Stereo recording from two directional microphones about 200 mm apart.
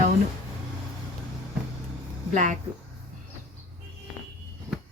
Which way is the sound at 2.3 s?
40° right (ahead or behind).